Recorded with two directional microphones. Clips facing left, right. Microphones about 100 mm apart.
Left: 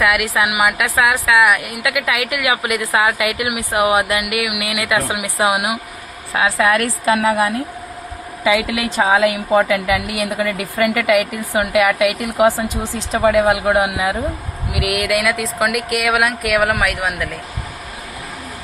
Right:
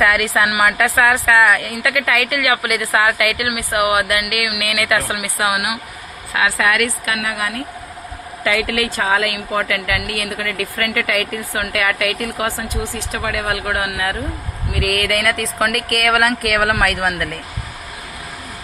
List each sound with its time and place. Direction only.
0.0 s a woman's voice: 5° left (ahead or behind); by 7.6 s 30° left (ahead or behind)
8.4 s a woman's voice: 15° left (ahead or behind); by 17.3 s centre (ahead or behind)